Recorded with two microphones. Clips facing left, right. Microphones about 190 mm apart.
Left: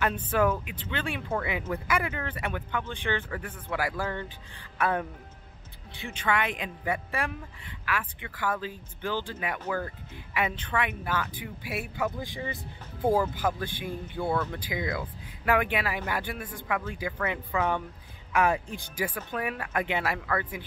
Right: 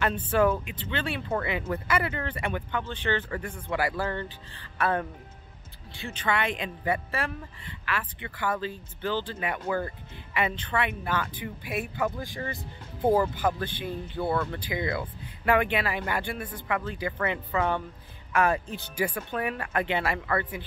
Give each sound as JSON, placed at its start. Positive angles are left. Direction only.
{"t": 0.0, "sound": "speech", "side_deg": 10}
{"t": 9.7, "sound": "speech", "side_deg": -5}
{"t": 10.3, "sound": "speech", "side_deg": 10}
{"t": 12.2, "sound": "speech", "side_deg": 20}
{"t": 14.2, "sound": "speech", "side_deg": -5}
{"t": 14.6, "sound": "speech", "side_deg": 5}